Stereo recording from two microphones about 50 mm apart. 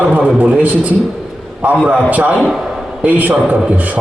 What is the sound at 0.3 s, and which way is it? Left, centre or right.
A man's voice, right.